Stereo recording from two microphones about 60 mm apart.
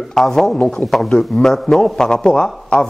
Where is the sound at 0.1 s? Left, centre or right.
Centre.